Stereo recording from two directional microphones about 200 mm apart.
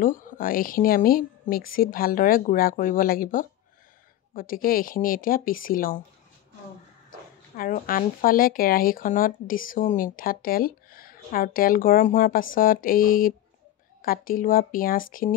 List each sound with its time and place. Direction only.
0.0 s speech: 40° left (ahead or behind)
7.5 s speech: 45° left (ahead or behind)